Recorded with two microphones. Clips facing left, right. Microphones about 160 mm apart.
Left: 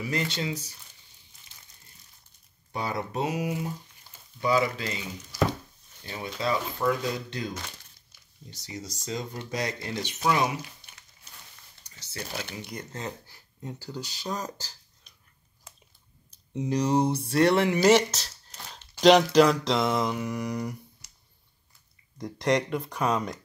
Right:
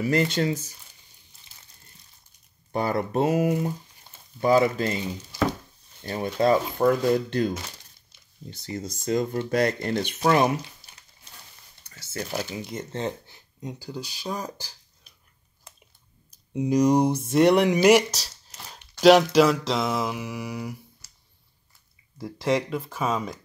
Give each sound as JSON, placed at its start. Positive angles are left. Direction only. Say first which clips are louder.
{"t": 0.1, "sound": "speech", "louder": "right 7 dB", "side_deg": -50}
{"t": 2.7, "sound": "speech", "louder": "right 6 dB", "side_deg": -50}
{"t": 6.0, "sound": "speech", "louder": "right 8 dB", "side_deg": -50}
{"t": 8.5, "sound": "speech", "louder": "right 6 dB", "side_deg": -55}
{"t": 10.8, "sound": "dog", "louder": "right 1 dB", "side_deg": -5}
{"t": 11.8, "sound": "a sound", "louder": "right 6 dB", "side_deg": -50}
{"t": 12.5, "sound": "speech", "louder": "right 6 dB", "side_deg": -25}
{"t": 13.6, "sound": "speech", "louder": "right 2 dB", "side_deg": -15}
{"t": 16.5, "sound": "speech", "louder": "right 5 dB", "side_deg": -10}
{"t": 18.7, "sound": "mantra", "louder": "right 3 dB", "side_deg": -5}
{"t": 22.2, "sound": "mantra", "louder": "right 1 dB", "side_deg": -5}